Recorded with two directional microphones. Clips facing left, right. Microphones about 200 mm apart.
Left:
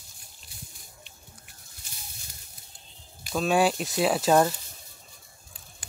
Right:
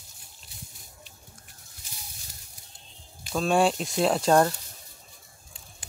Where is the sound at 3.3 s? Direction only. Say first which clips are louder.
Even; 5° left (ahead or behind).